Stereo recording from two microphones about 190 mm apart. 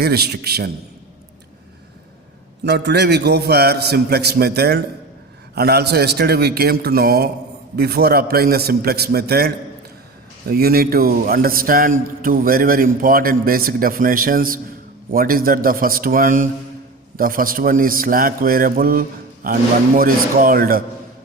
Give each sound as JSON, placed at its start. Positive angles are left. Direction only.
{"t": 0.0, "sound": "a man's voice", "side_deg": -55}
{"t": 2.6, "sound": "a man's voice", "side_deg": -60}